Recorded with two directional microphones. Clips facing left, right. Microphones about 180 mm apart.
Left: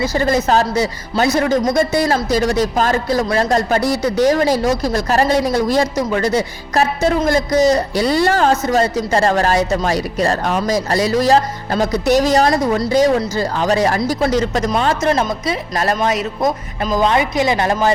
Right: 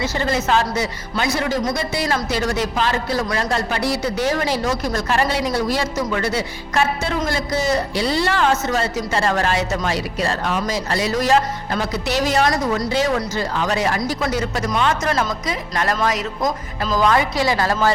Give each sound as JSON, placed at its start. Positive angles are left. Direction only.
{"t": 0.2, "sound": "a man's voice", "side_deg": 40}
{"t": 1.4, "sound": "a man's voice", "side_deg": 50}